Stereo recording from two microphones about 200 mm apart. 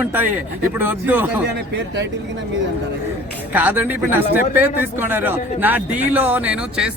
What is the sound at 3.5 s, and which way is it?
A man's voice, 10° right (ahead or behind).